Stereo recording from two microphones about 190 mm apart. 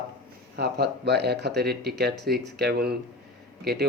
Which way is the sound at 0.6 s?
60° right (ahead or behind).